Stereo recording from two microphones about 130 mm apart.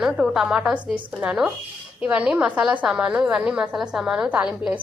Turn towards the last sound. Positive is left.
turn(degrees=-10)  # may be behind; listen again after turning